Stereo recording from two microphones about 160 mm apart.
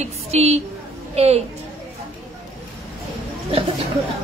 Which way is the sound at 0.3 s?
40° right (ahead or behind).